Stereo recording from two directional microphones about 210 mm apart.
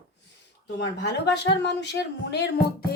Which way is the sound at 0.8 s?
55° left (ahead or behind).